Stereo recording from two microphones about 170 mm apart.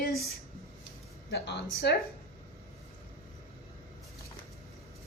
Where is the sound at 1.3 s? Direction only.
80° left.